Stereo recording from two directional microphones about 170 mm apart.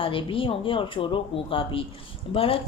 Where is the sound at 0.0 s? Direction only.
30° left (ahead or behind).